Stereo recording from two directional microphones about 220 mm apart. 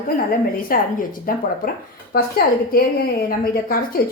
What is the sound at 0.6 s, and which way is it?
A woman's voice, 40° left (ahead or behind).